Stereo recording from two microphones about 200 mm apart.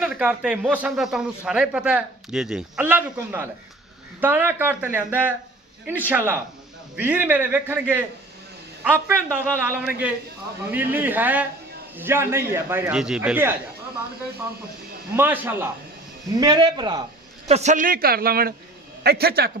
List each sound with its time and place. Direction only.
0.0 s a man's voice: 5° right (ahead or behind)
15.1 s a man's voice: 10° right (ahead or behind)
16.4 s a man's voice: 20° right (ahead or behind)
17.5 s a man's voice: 35° right (ahead or behind)